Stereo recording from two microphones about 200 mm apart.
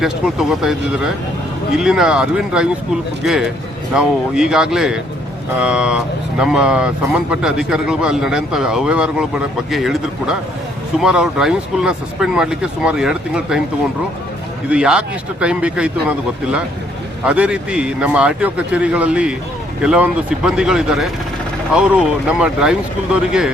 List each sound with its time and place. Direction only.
0.0 s speech: centre (ahead or behind)
14.7 s speech: 5° right (ahead or behind)